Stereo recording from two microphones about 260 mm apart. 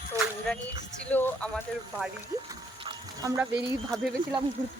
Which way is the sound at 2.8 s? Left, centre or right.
Centre.